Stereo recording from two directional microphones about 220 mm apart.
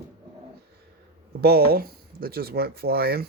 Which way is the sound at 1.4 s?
45° right (ahead or behind).